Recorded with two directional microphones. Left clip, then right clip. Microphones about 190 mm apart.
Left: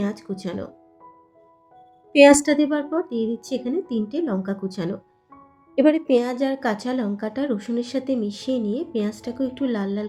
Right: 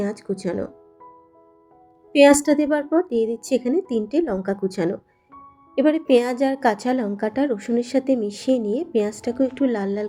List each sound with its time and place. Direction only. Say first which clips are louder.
0.0 s speech: right 4 dB; 20° right (ahead or behind)
2.1 s a woman's voice: left 1 dB; centre (ahead or behind)
2.6 s a woman's voice: right 2 dB; 20° right (ahead or behind)
5.7 s a woman's voice: even; centre (ahead or behind)
6.1 s a woman's voice: right 3 dB; 15° right (ahead or behind)